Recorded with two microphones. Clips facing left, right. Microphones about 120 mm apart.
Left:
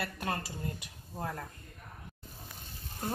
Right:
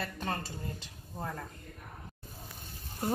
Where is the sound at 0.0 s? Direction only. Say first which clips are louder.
Even; 10° left (ahead or behind).